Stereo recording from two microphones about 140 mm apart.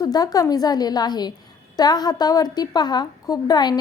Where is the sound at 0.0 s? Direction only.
25° left (ahead or behind).